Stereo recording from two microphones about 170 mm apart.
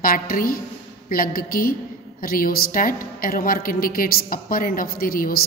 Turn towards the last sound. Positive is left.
turn(degrees=60)  # may be behind; listen again after turning